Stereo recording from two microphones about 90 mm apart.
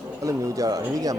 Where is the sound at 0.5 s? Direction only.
40° right (ahead or behind).